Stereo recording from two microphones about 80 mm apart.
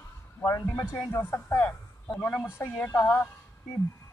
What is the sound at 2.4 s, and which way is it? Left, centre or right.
Speech, left.